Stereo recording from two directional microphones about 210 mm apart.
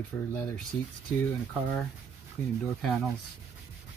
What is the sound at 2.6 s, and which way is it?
Speech, centre (ahead or behind).